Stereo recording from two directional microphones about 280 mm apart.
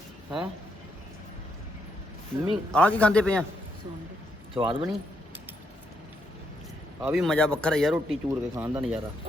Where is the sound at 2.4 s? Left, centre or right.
Centre.